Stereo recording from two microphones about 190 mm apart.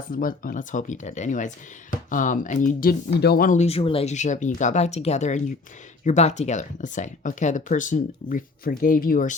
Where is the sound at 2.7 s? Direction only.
55° left (ahead or behind).